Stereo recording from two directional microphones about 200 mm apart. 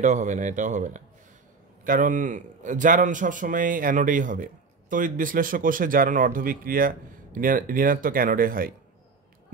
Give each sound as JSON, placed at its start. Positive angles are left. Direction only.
{"t": 0.0, "sound": "a man's voice", "side_deg": -35}